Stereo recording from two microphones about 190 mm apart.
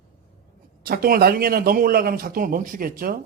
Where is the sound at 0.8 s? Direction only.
50° right (ahead or behind).